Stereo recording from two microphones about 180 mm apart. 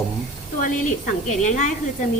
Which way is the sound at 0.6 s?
45° left (ahead or behind).